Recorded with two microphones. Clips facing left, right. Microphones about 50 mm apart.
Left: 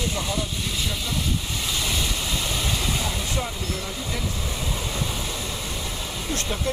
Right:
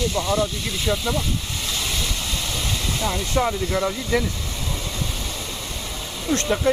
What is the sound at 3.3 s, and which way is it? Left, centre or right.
Speech, right.